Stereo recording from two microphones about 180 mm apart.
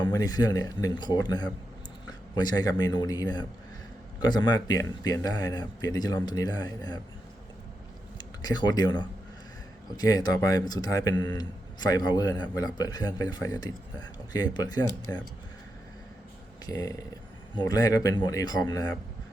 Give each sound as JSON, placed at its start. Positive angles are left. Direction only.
{"t": 0.0, "sound": "a man's voice", "side_deg": 20}
{"t": 8.2, "sound": "speech", "side_deg": 20}
{"t": 16.6, "sound": "speech", "side_deg": 20}